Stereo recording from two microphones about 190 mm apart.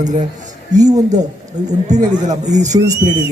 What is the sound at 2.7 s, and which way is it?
Speech, 25° right (ahead or behind).